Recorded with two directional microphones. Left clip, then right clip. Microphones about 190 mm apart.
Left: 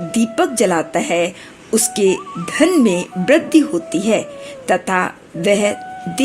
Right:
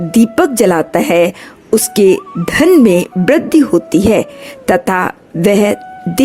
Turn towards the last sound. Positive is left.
turn(degrees=-45)  # may be behind; listen again after turning